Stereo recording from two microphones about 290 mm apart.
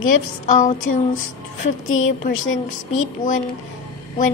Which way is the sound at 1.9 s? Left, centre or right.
Left.